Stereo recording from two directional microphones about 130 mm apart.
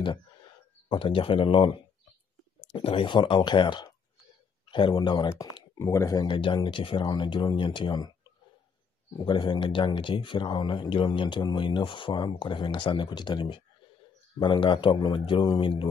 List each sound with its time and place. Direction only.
0.8 s speech: 40° left (ahead or behind)
5.8 s speech: 25° left (ahead or behind)
6.2 s speech: 40° left (ahead or behind)
9.2 s speech: 35° left (ahead or behind)